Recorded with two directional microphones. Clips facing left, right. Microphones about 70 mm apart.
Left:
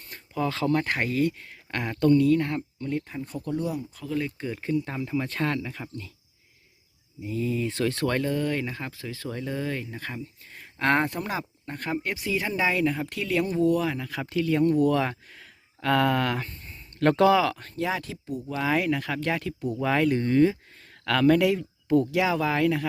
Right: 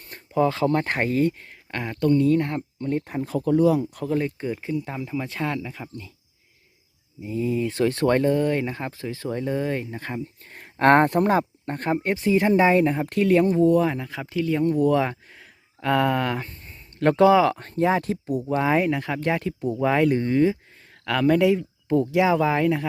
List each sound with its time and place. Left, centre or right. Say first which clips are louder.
0.1 s speech: right 7 dB; right
1.8 s speech: even; centre
2.1 s speech: right 1 dB; right
4.0 s speech: right 5 dB; right
4.5 s speech: even; centre
7.2 s speech: right 3 dB; right
10.5 s speech: right 7 dB; right
13.1 s speech: right 11 dB; right
13.3 s speech: right 5 dB; right
18.4 s speech: right 4 dB; right